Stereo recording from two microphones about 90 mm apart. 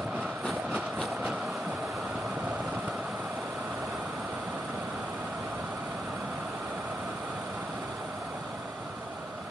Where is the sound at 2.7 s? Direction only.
10° right (ahead or behind).